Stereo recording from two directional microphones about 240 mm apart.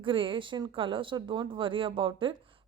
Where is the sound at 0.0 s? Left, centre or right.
Right.